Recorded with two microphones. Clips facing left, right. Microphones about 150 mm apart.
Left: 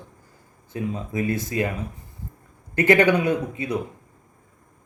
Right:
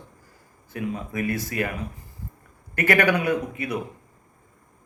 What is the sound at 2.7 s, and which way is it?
A man's voice, 25° left (ahead or behind).